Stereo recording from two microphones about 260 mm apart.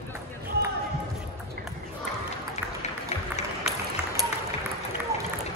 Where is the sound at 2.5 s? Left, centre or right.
Left.